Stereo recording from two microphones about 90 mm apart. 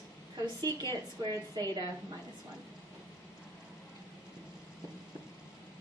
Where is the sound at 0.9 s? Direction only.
45° right (ahead or behind).